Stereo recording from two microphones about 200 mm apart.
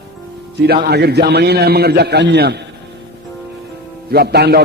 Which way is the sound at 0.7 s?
50° right (ahead or behind).